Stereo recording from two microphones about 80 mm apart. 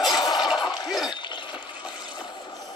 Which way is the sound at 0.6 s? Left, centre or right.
Left.